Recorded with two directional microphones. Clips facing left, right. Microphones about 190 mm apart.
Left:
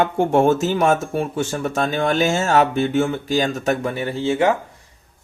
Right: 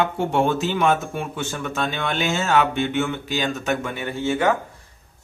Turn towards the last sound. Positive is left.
turn(degrees=25)  # may be behind; listen again after turning